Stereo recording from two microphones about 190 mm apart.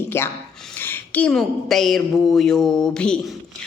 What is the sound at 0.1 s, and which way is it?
A woman's voice, 10° left (ahead or behind).